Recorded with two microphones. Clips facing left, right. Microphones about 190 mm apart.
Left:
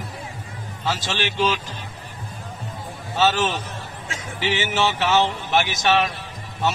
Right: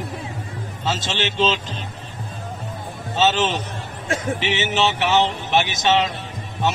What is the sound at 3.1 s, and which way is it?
Music, 20° right (ahead or behind).